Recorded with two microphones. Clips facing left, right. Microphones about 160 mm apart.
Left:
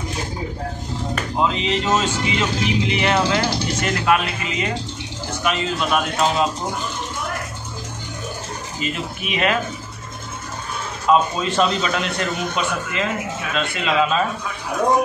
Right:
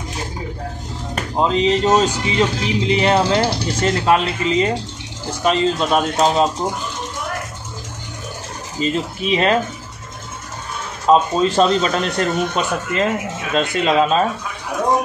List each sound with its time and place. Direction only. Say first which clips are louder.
1.1 s speech: right 4 dB; 35° right (ahead or behind)
8.7 s speech: right 7 dB; 30° right (ahead or behind)
11.1 s speech: right 4 dB; 35° right (ahead or behind)